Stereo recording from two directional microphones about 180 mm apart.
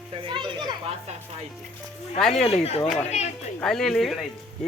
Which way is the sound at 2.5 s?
35° left (ahead or behind).